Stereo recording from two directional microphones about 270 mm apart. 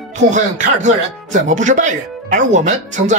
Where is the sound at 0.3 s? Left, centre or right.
Right.